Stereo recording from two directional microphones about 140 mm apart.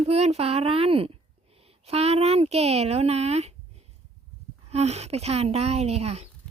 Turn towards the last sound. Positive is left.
turn(degrees=-50)  # may be behind; listen again after turning